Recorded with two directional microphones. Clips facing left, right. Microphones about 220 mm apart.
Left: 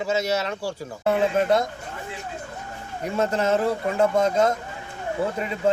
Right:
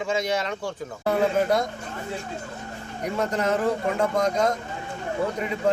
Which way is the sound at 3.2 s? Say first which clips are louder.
Left 3 dB; 25° left (ahead or behind).